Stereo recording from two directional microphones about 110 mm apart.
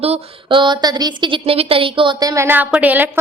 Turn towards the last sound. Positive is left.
turn(degrees=-15)  # may be behind; listen again after turning